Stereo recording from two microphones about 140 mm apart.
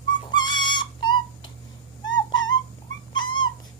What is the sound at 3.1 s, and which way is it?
Dog, 30° left (ahead or behind).